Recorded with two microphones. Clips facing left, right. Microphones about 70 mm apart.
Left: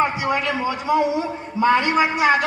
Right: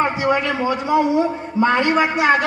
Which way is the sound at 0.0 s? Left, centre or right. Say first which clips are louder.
Right 2 dB; right.